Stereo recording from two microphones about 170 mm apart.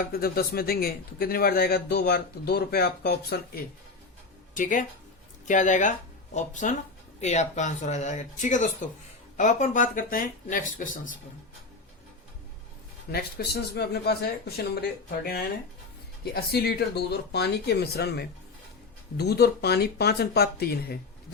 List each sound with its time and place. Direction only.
0.1 s speech: 65° left (ahead or behind)
4.5 s speech: 50° left (ahead or behind)
13.1 s speech: 65° left (ahead or behind)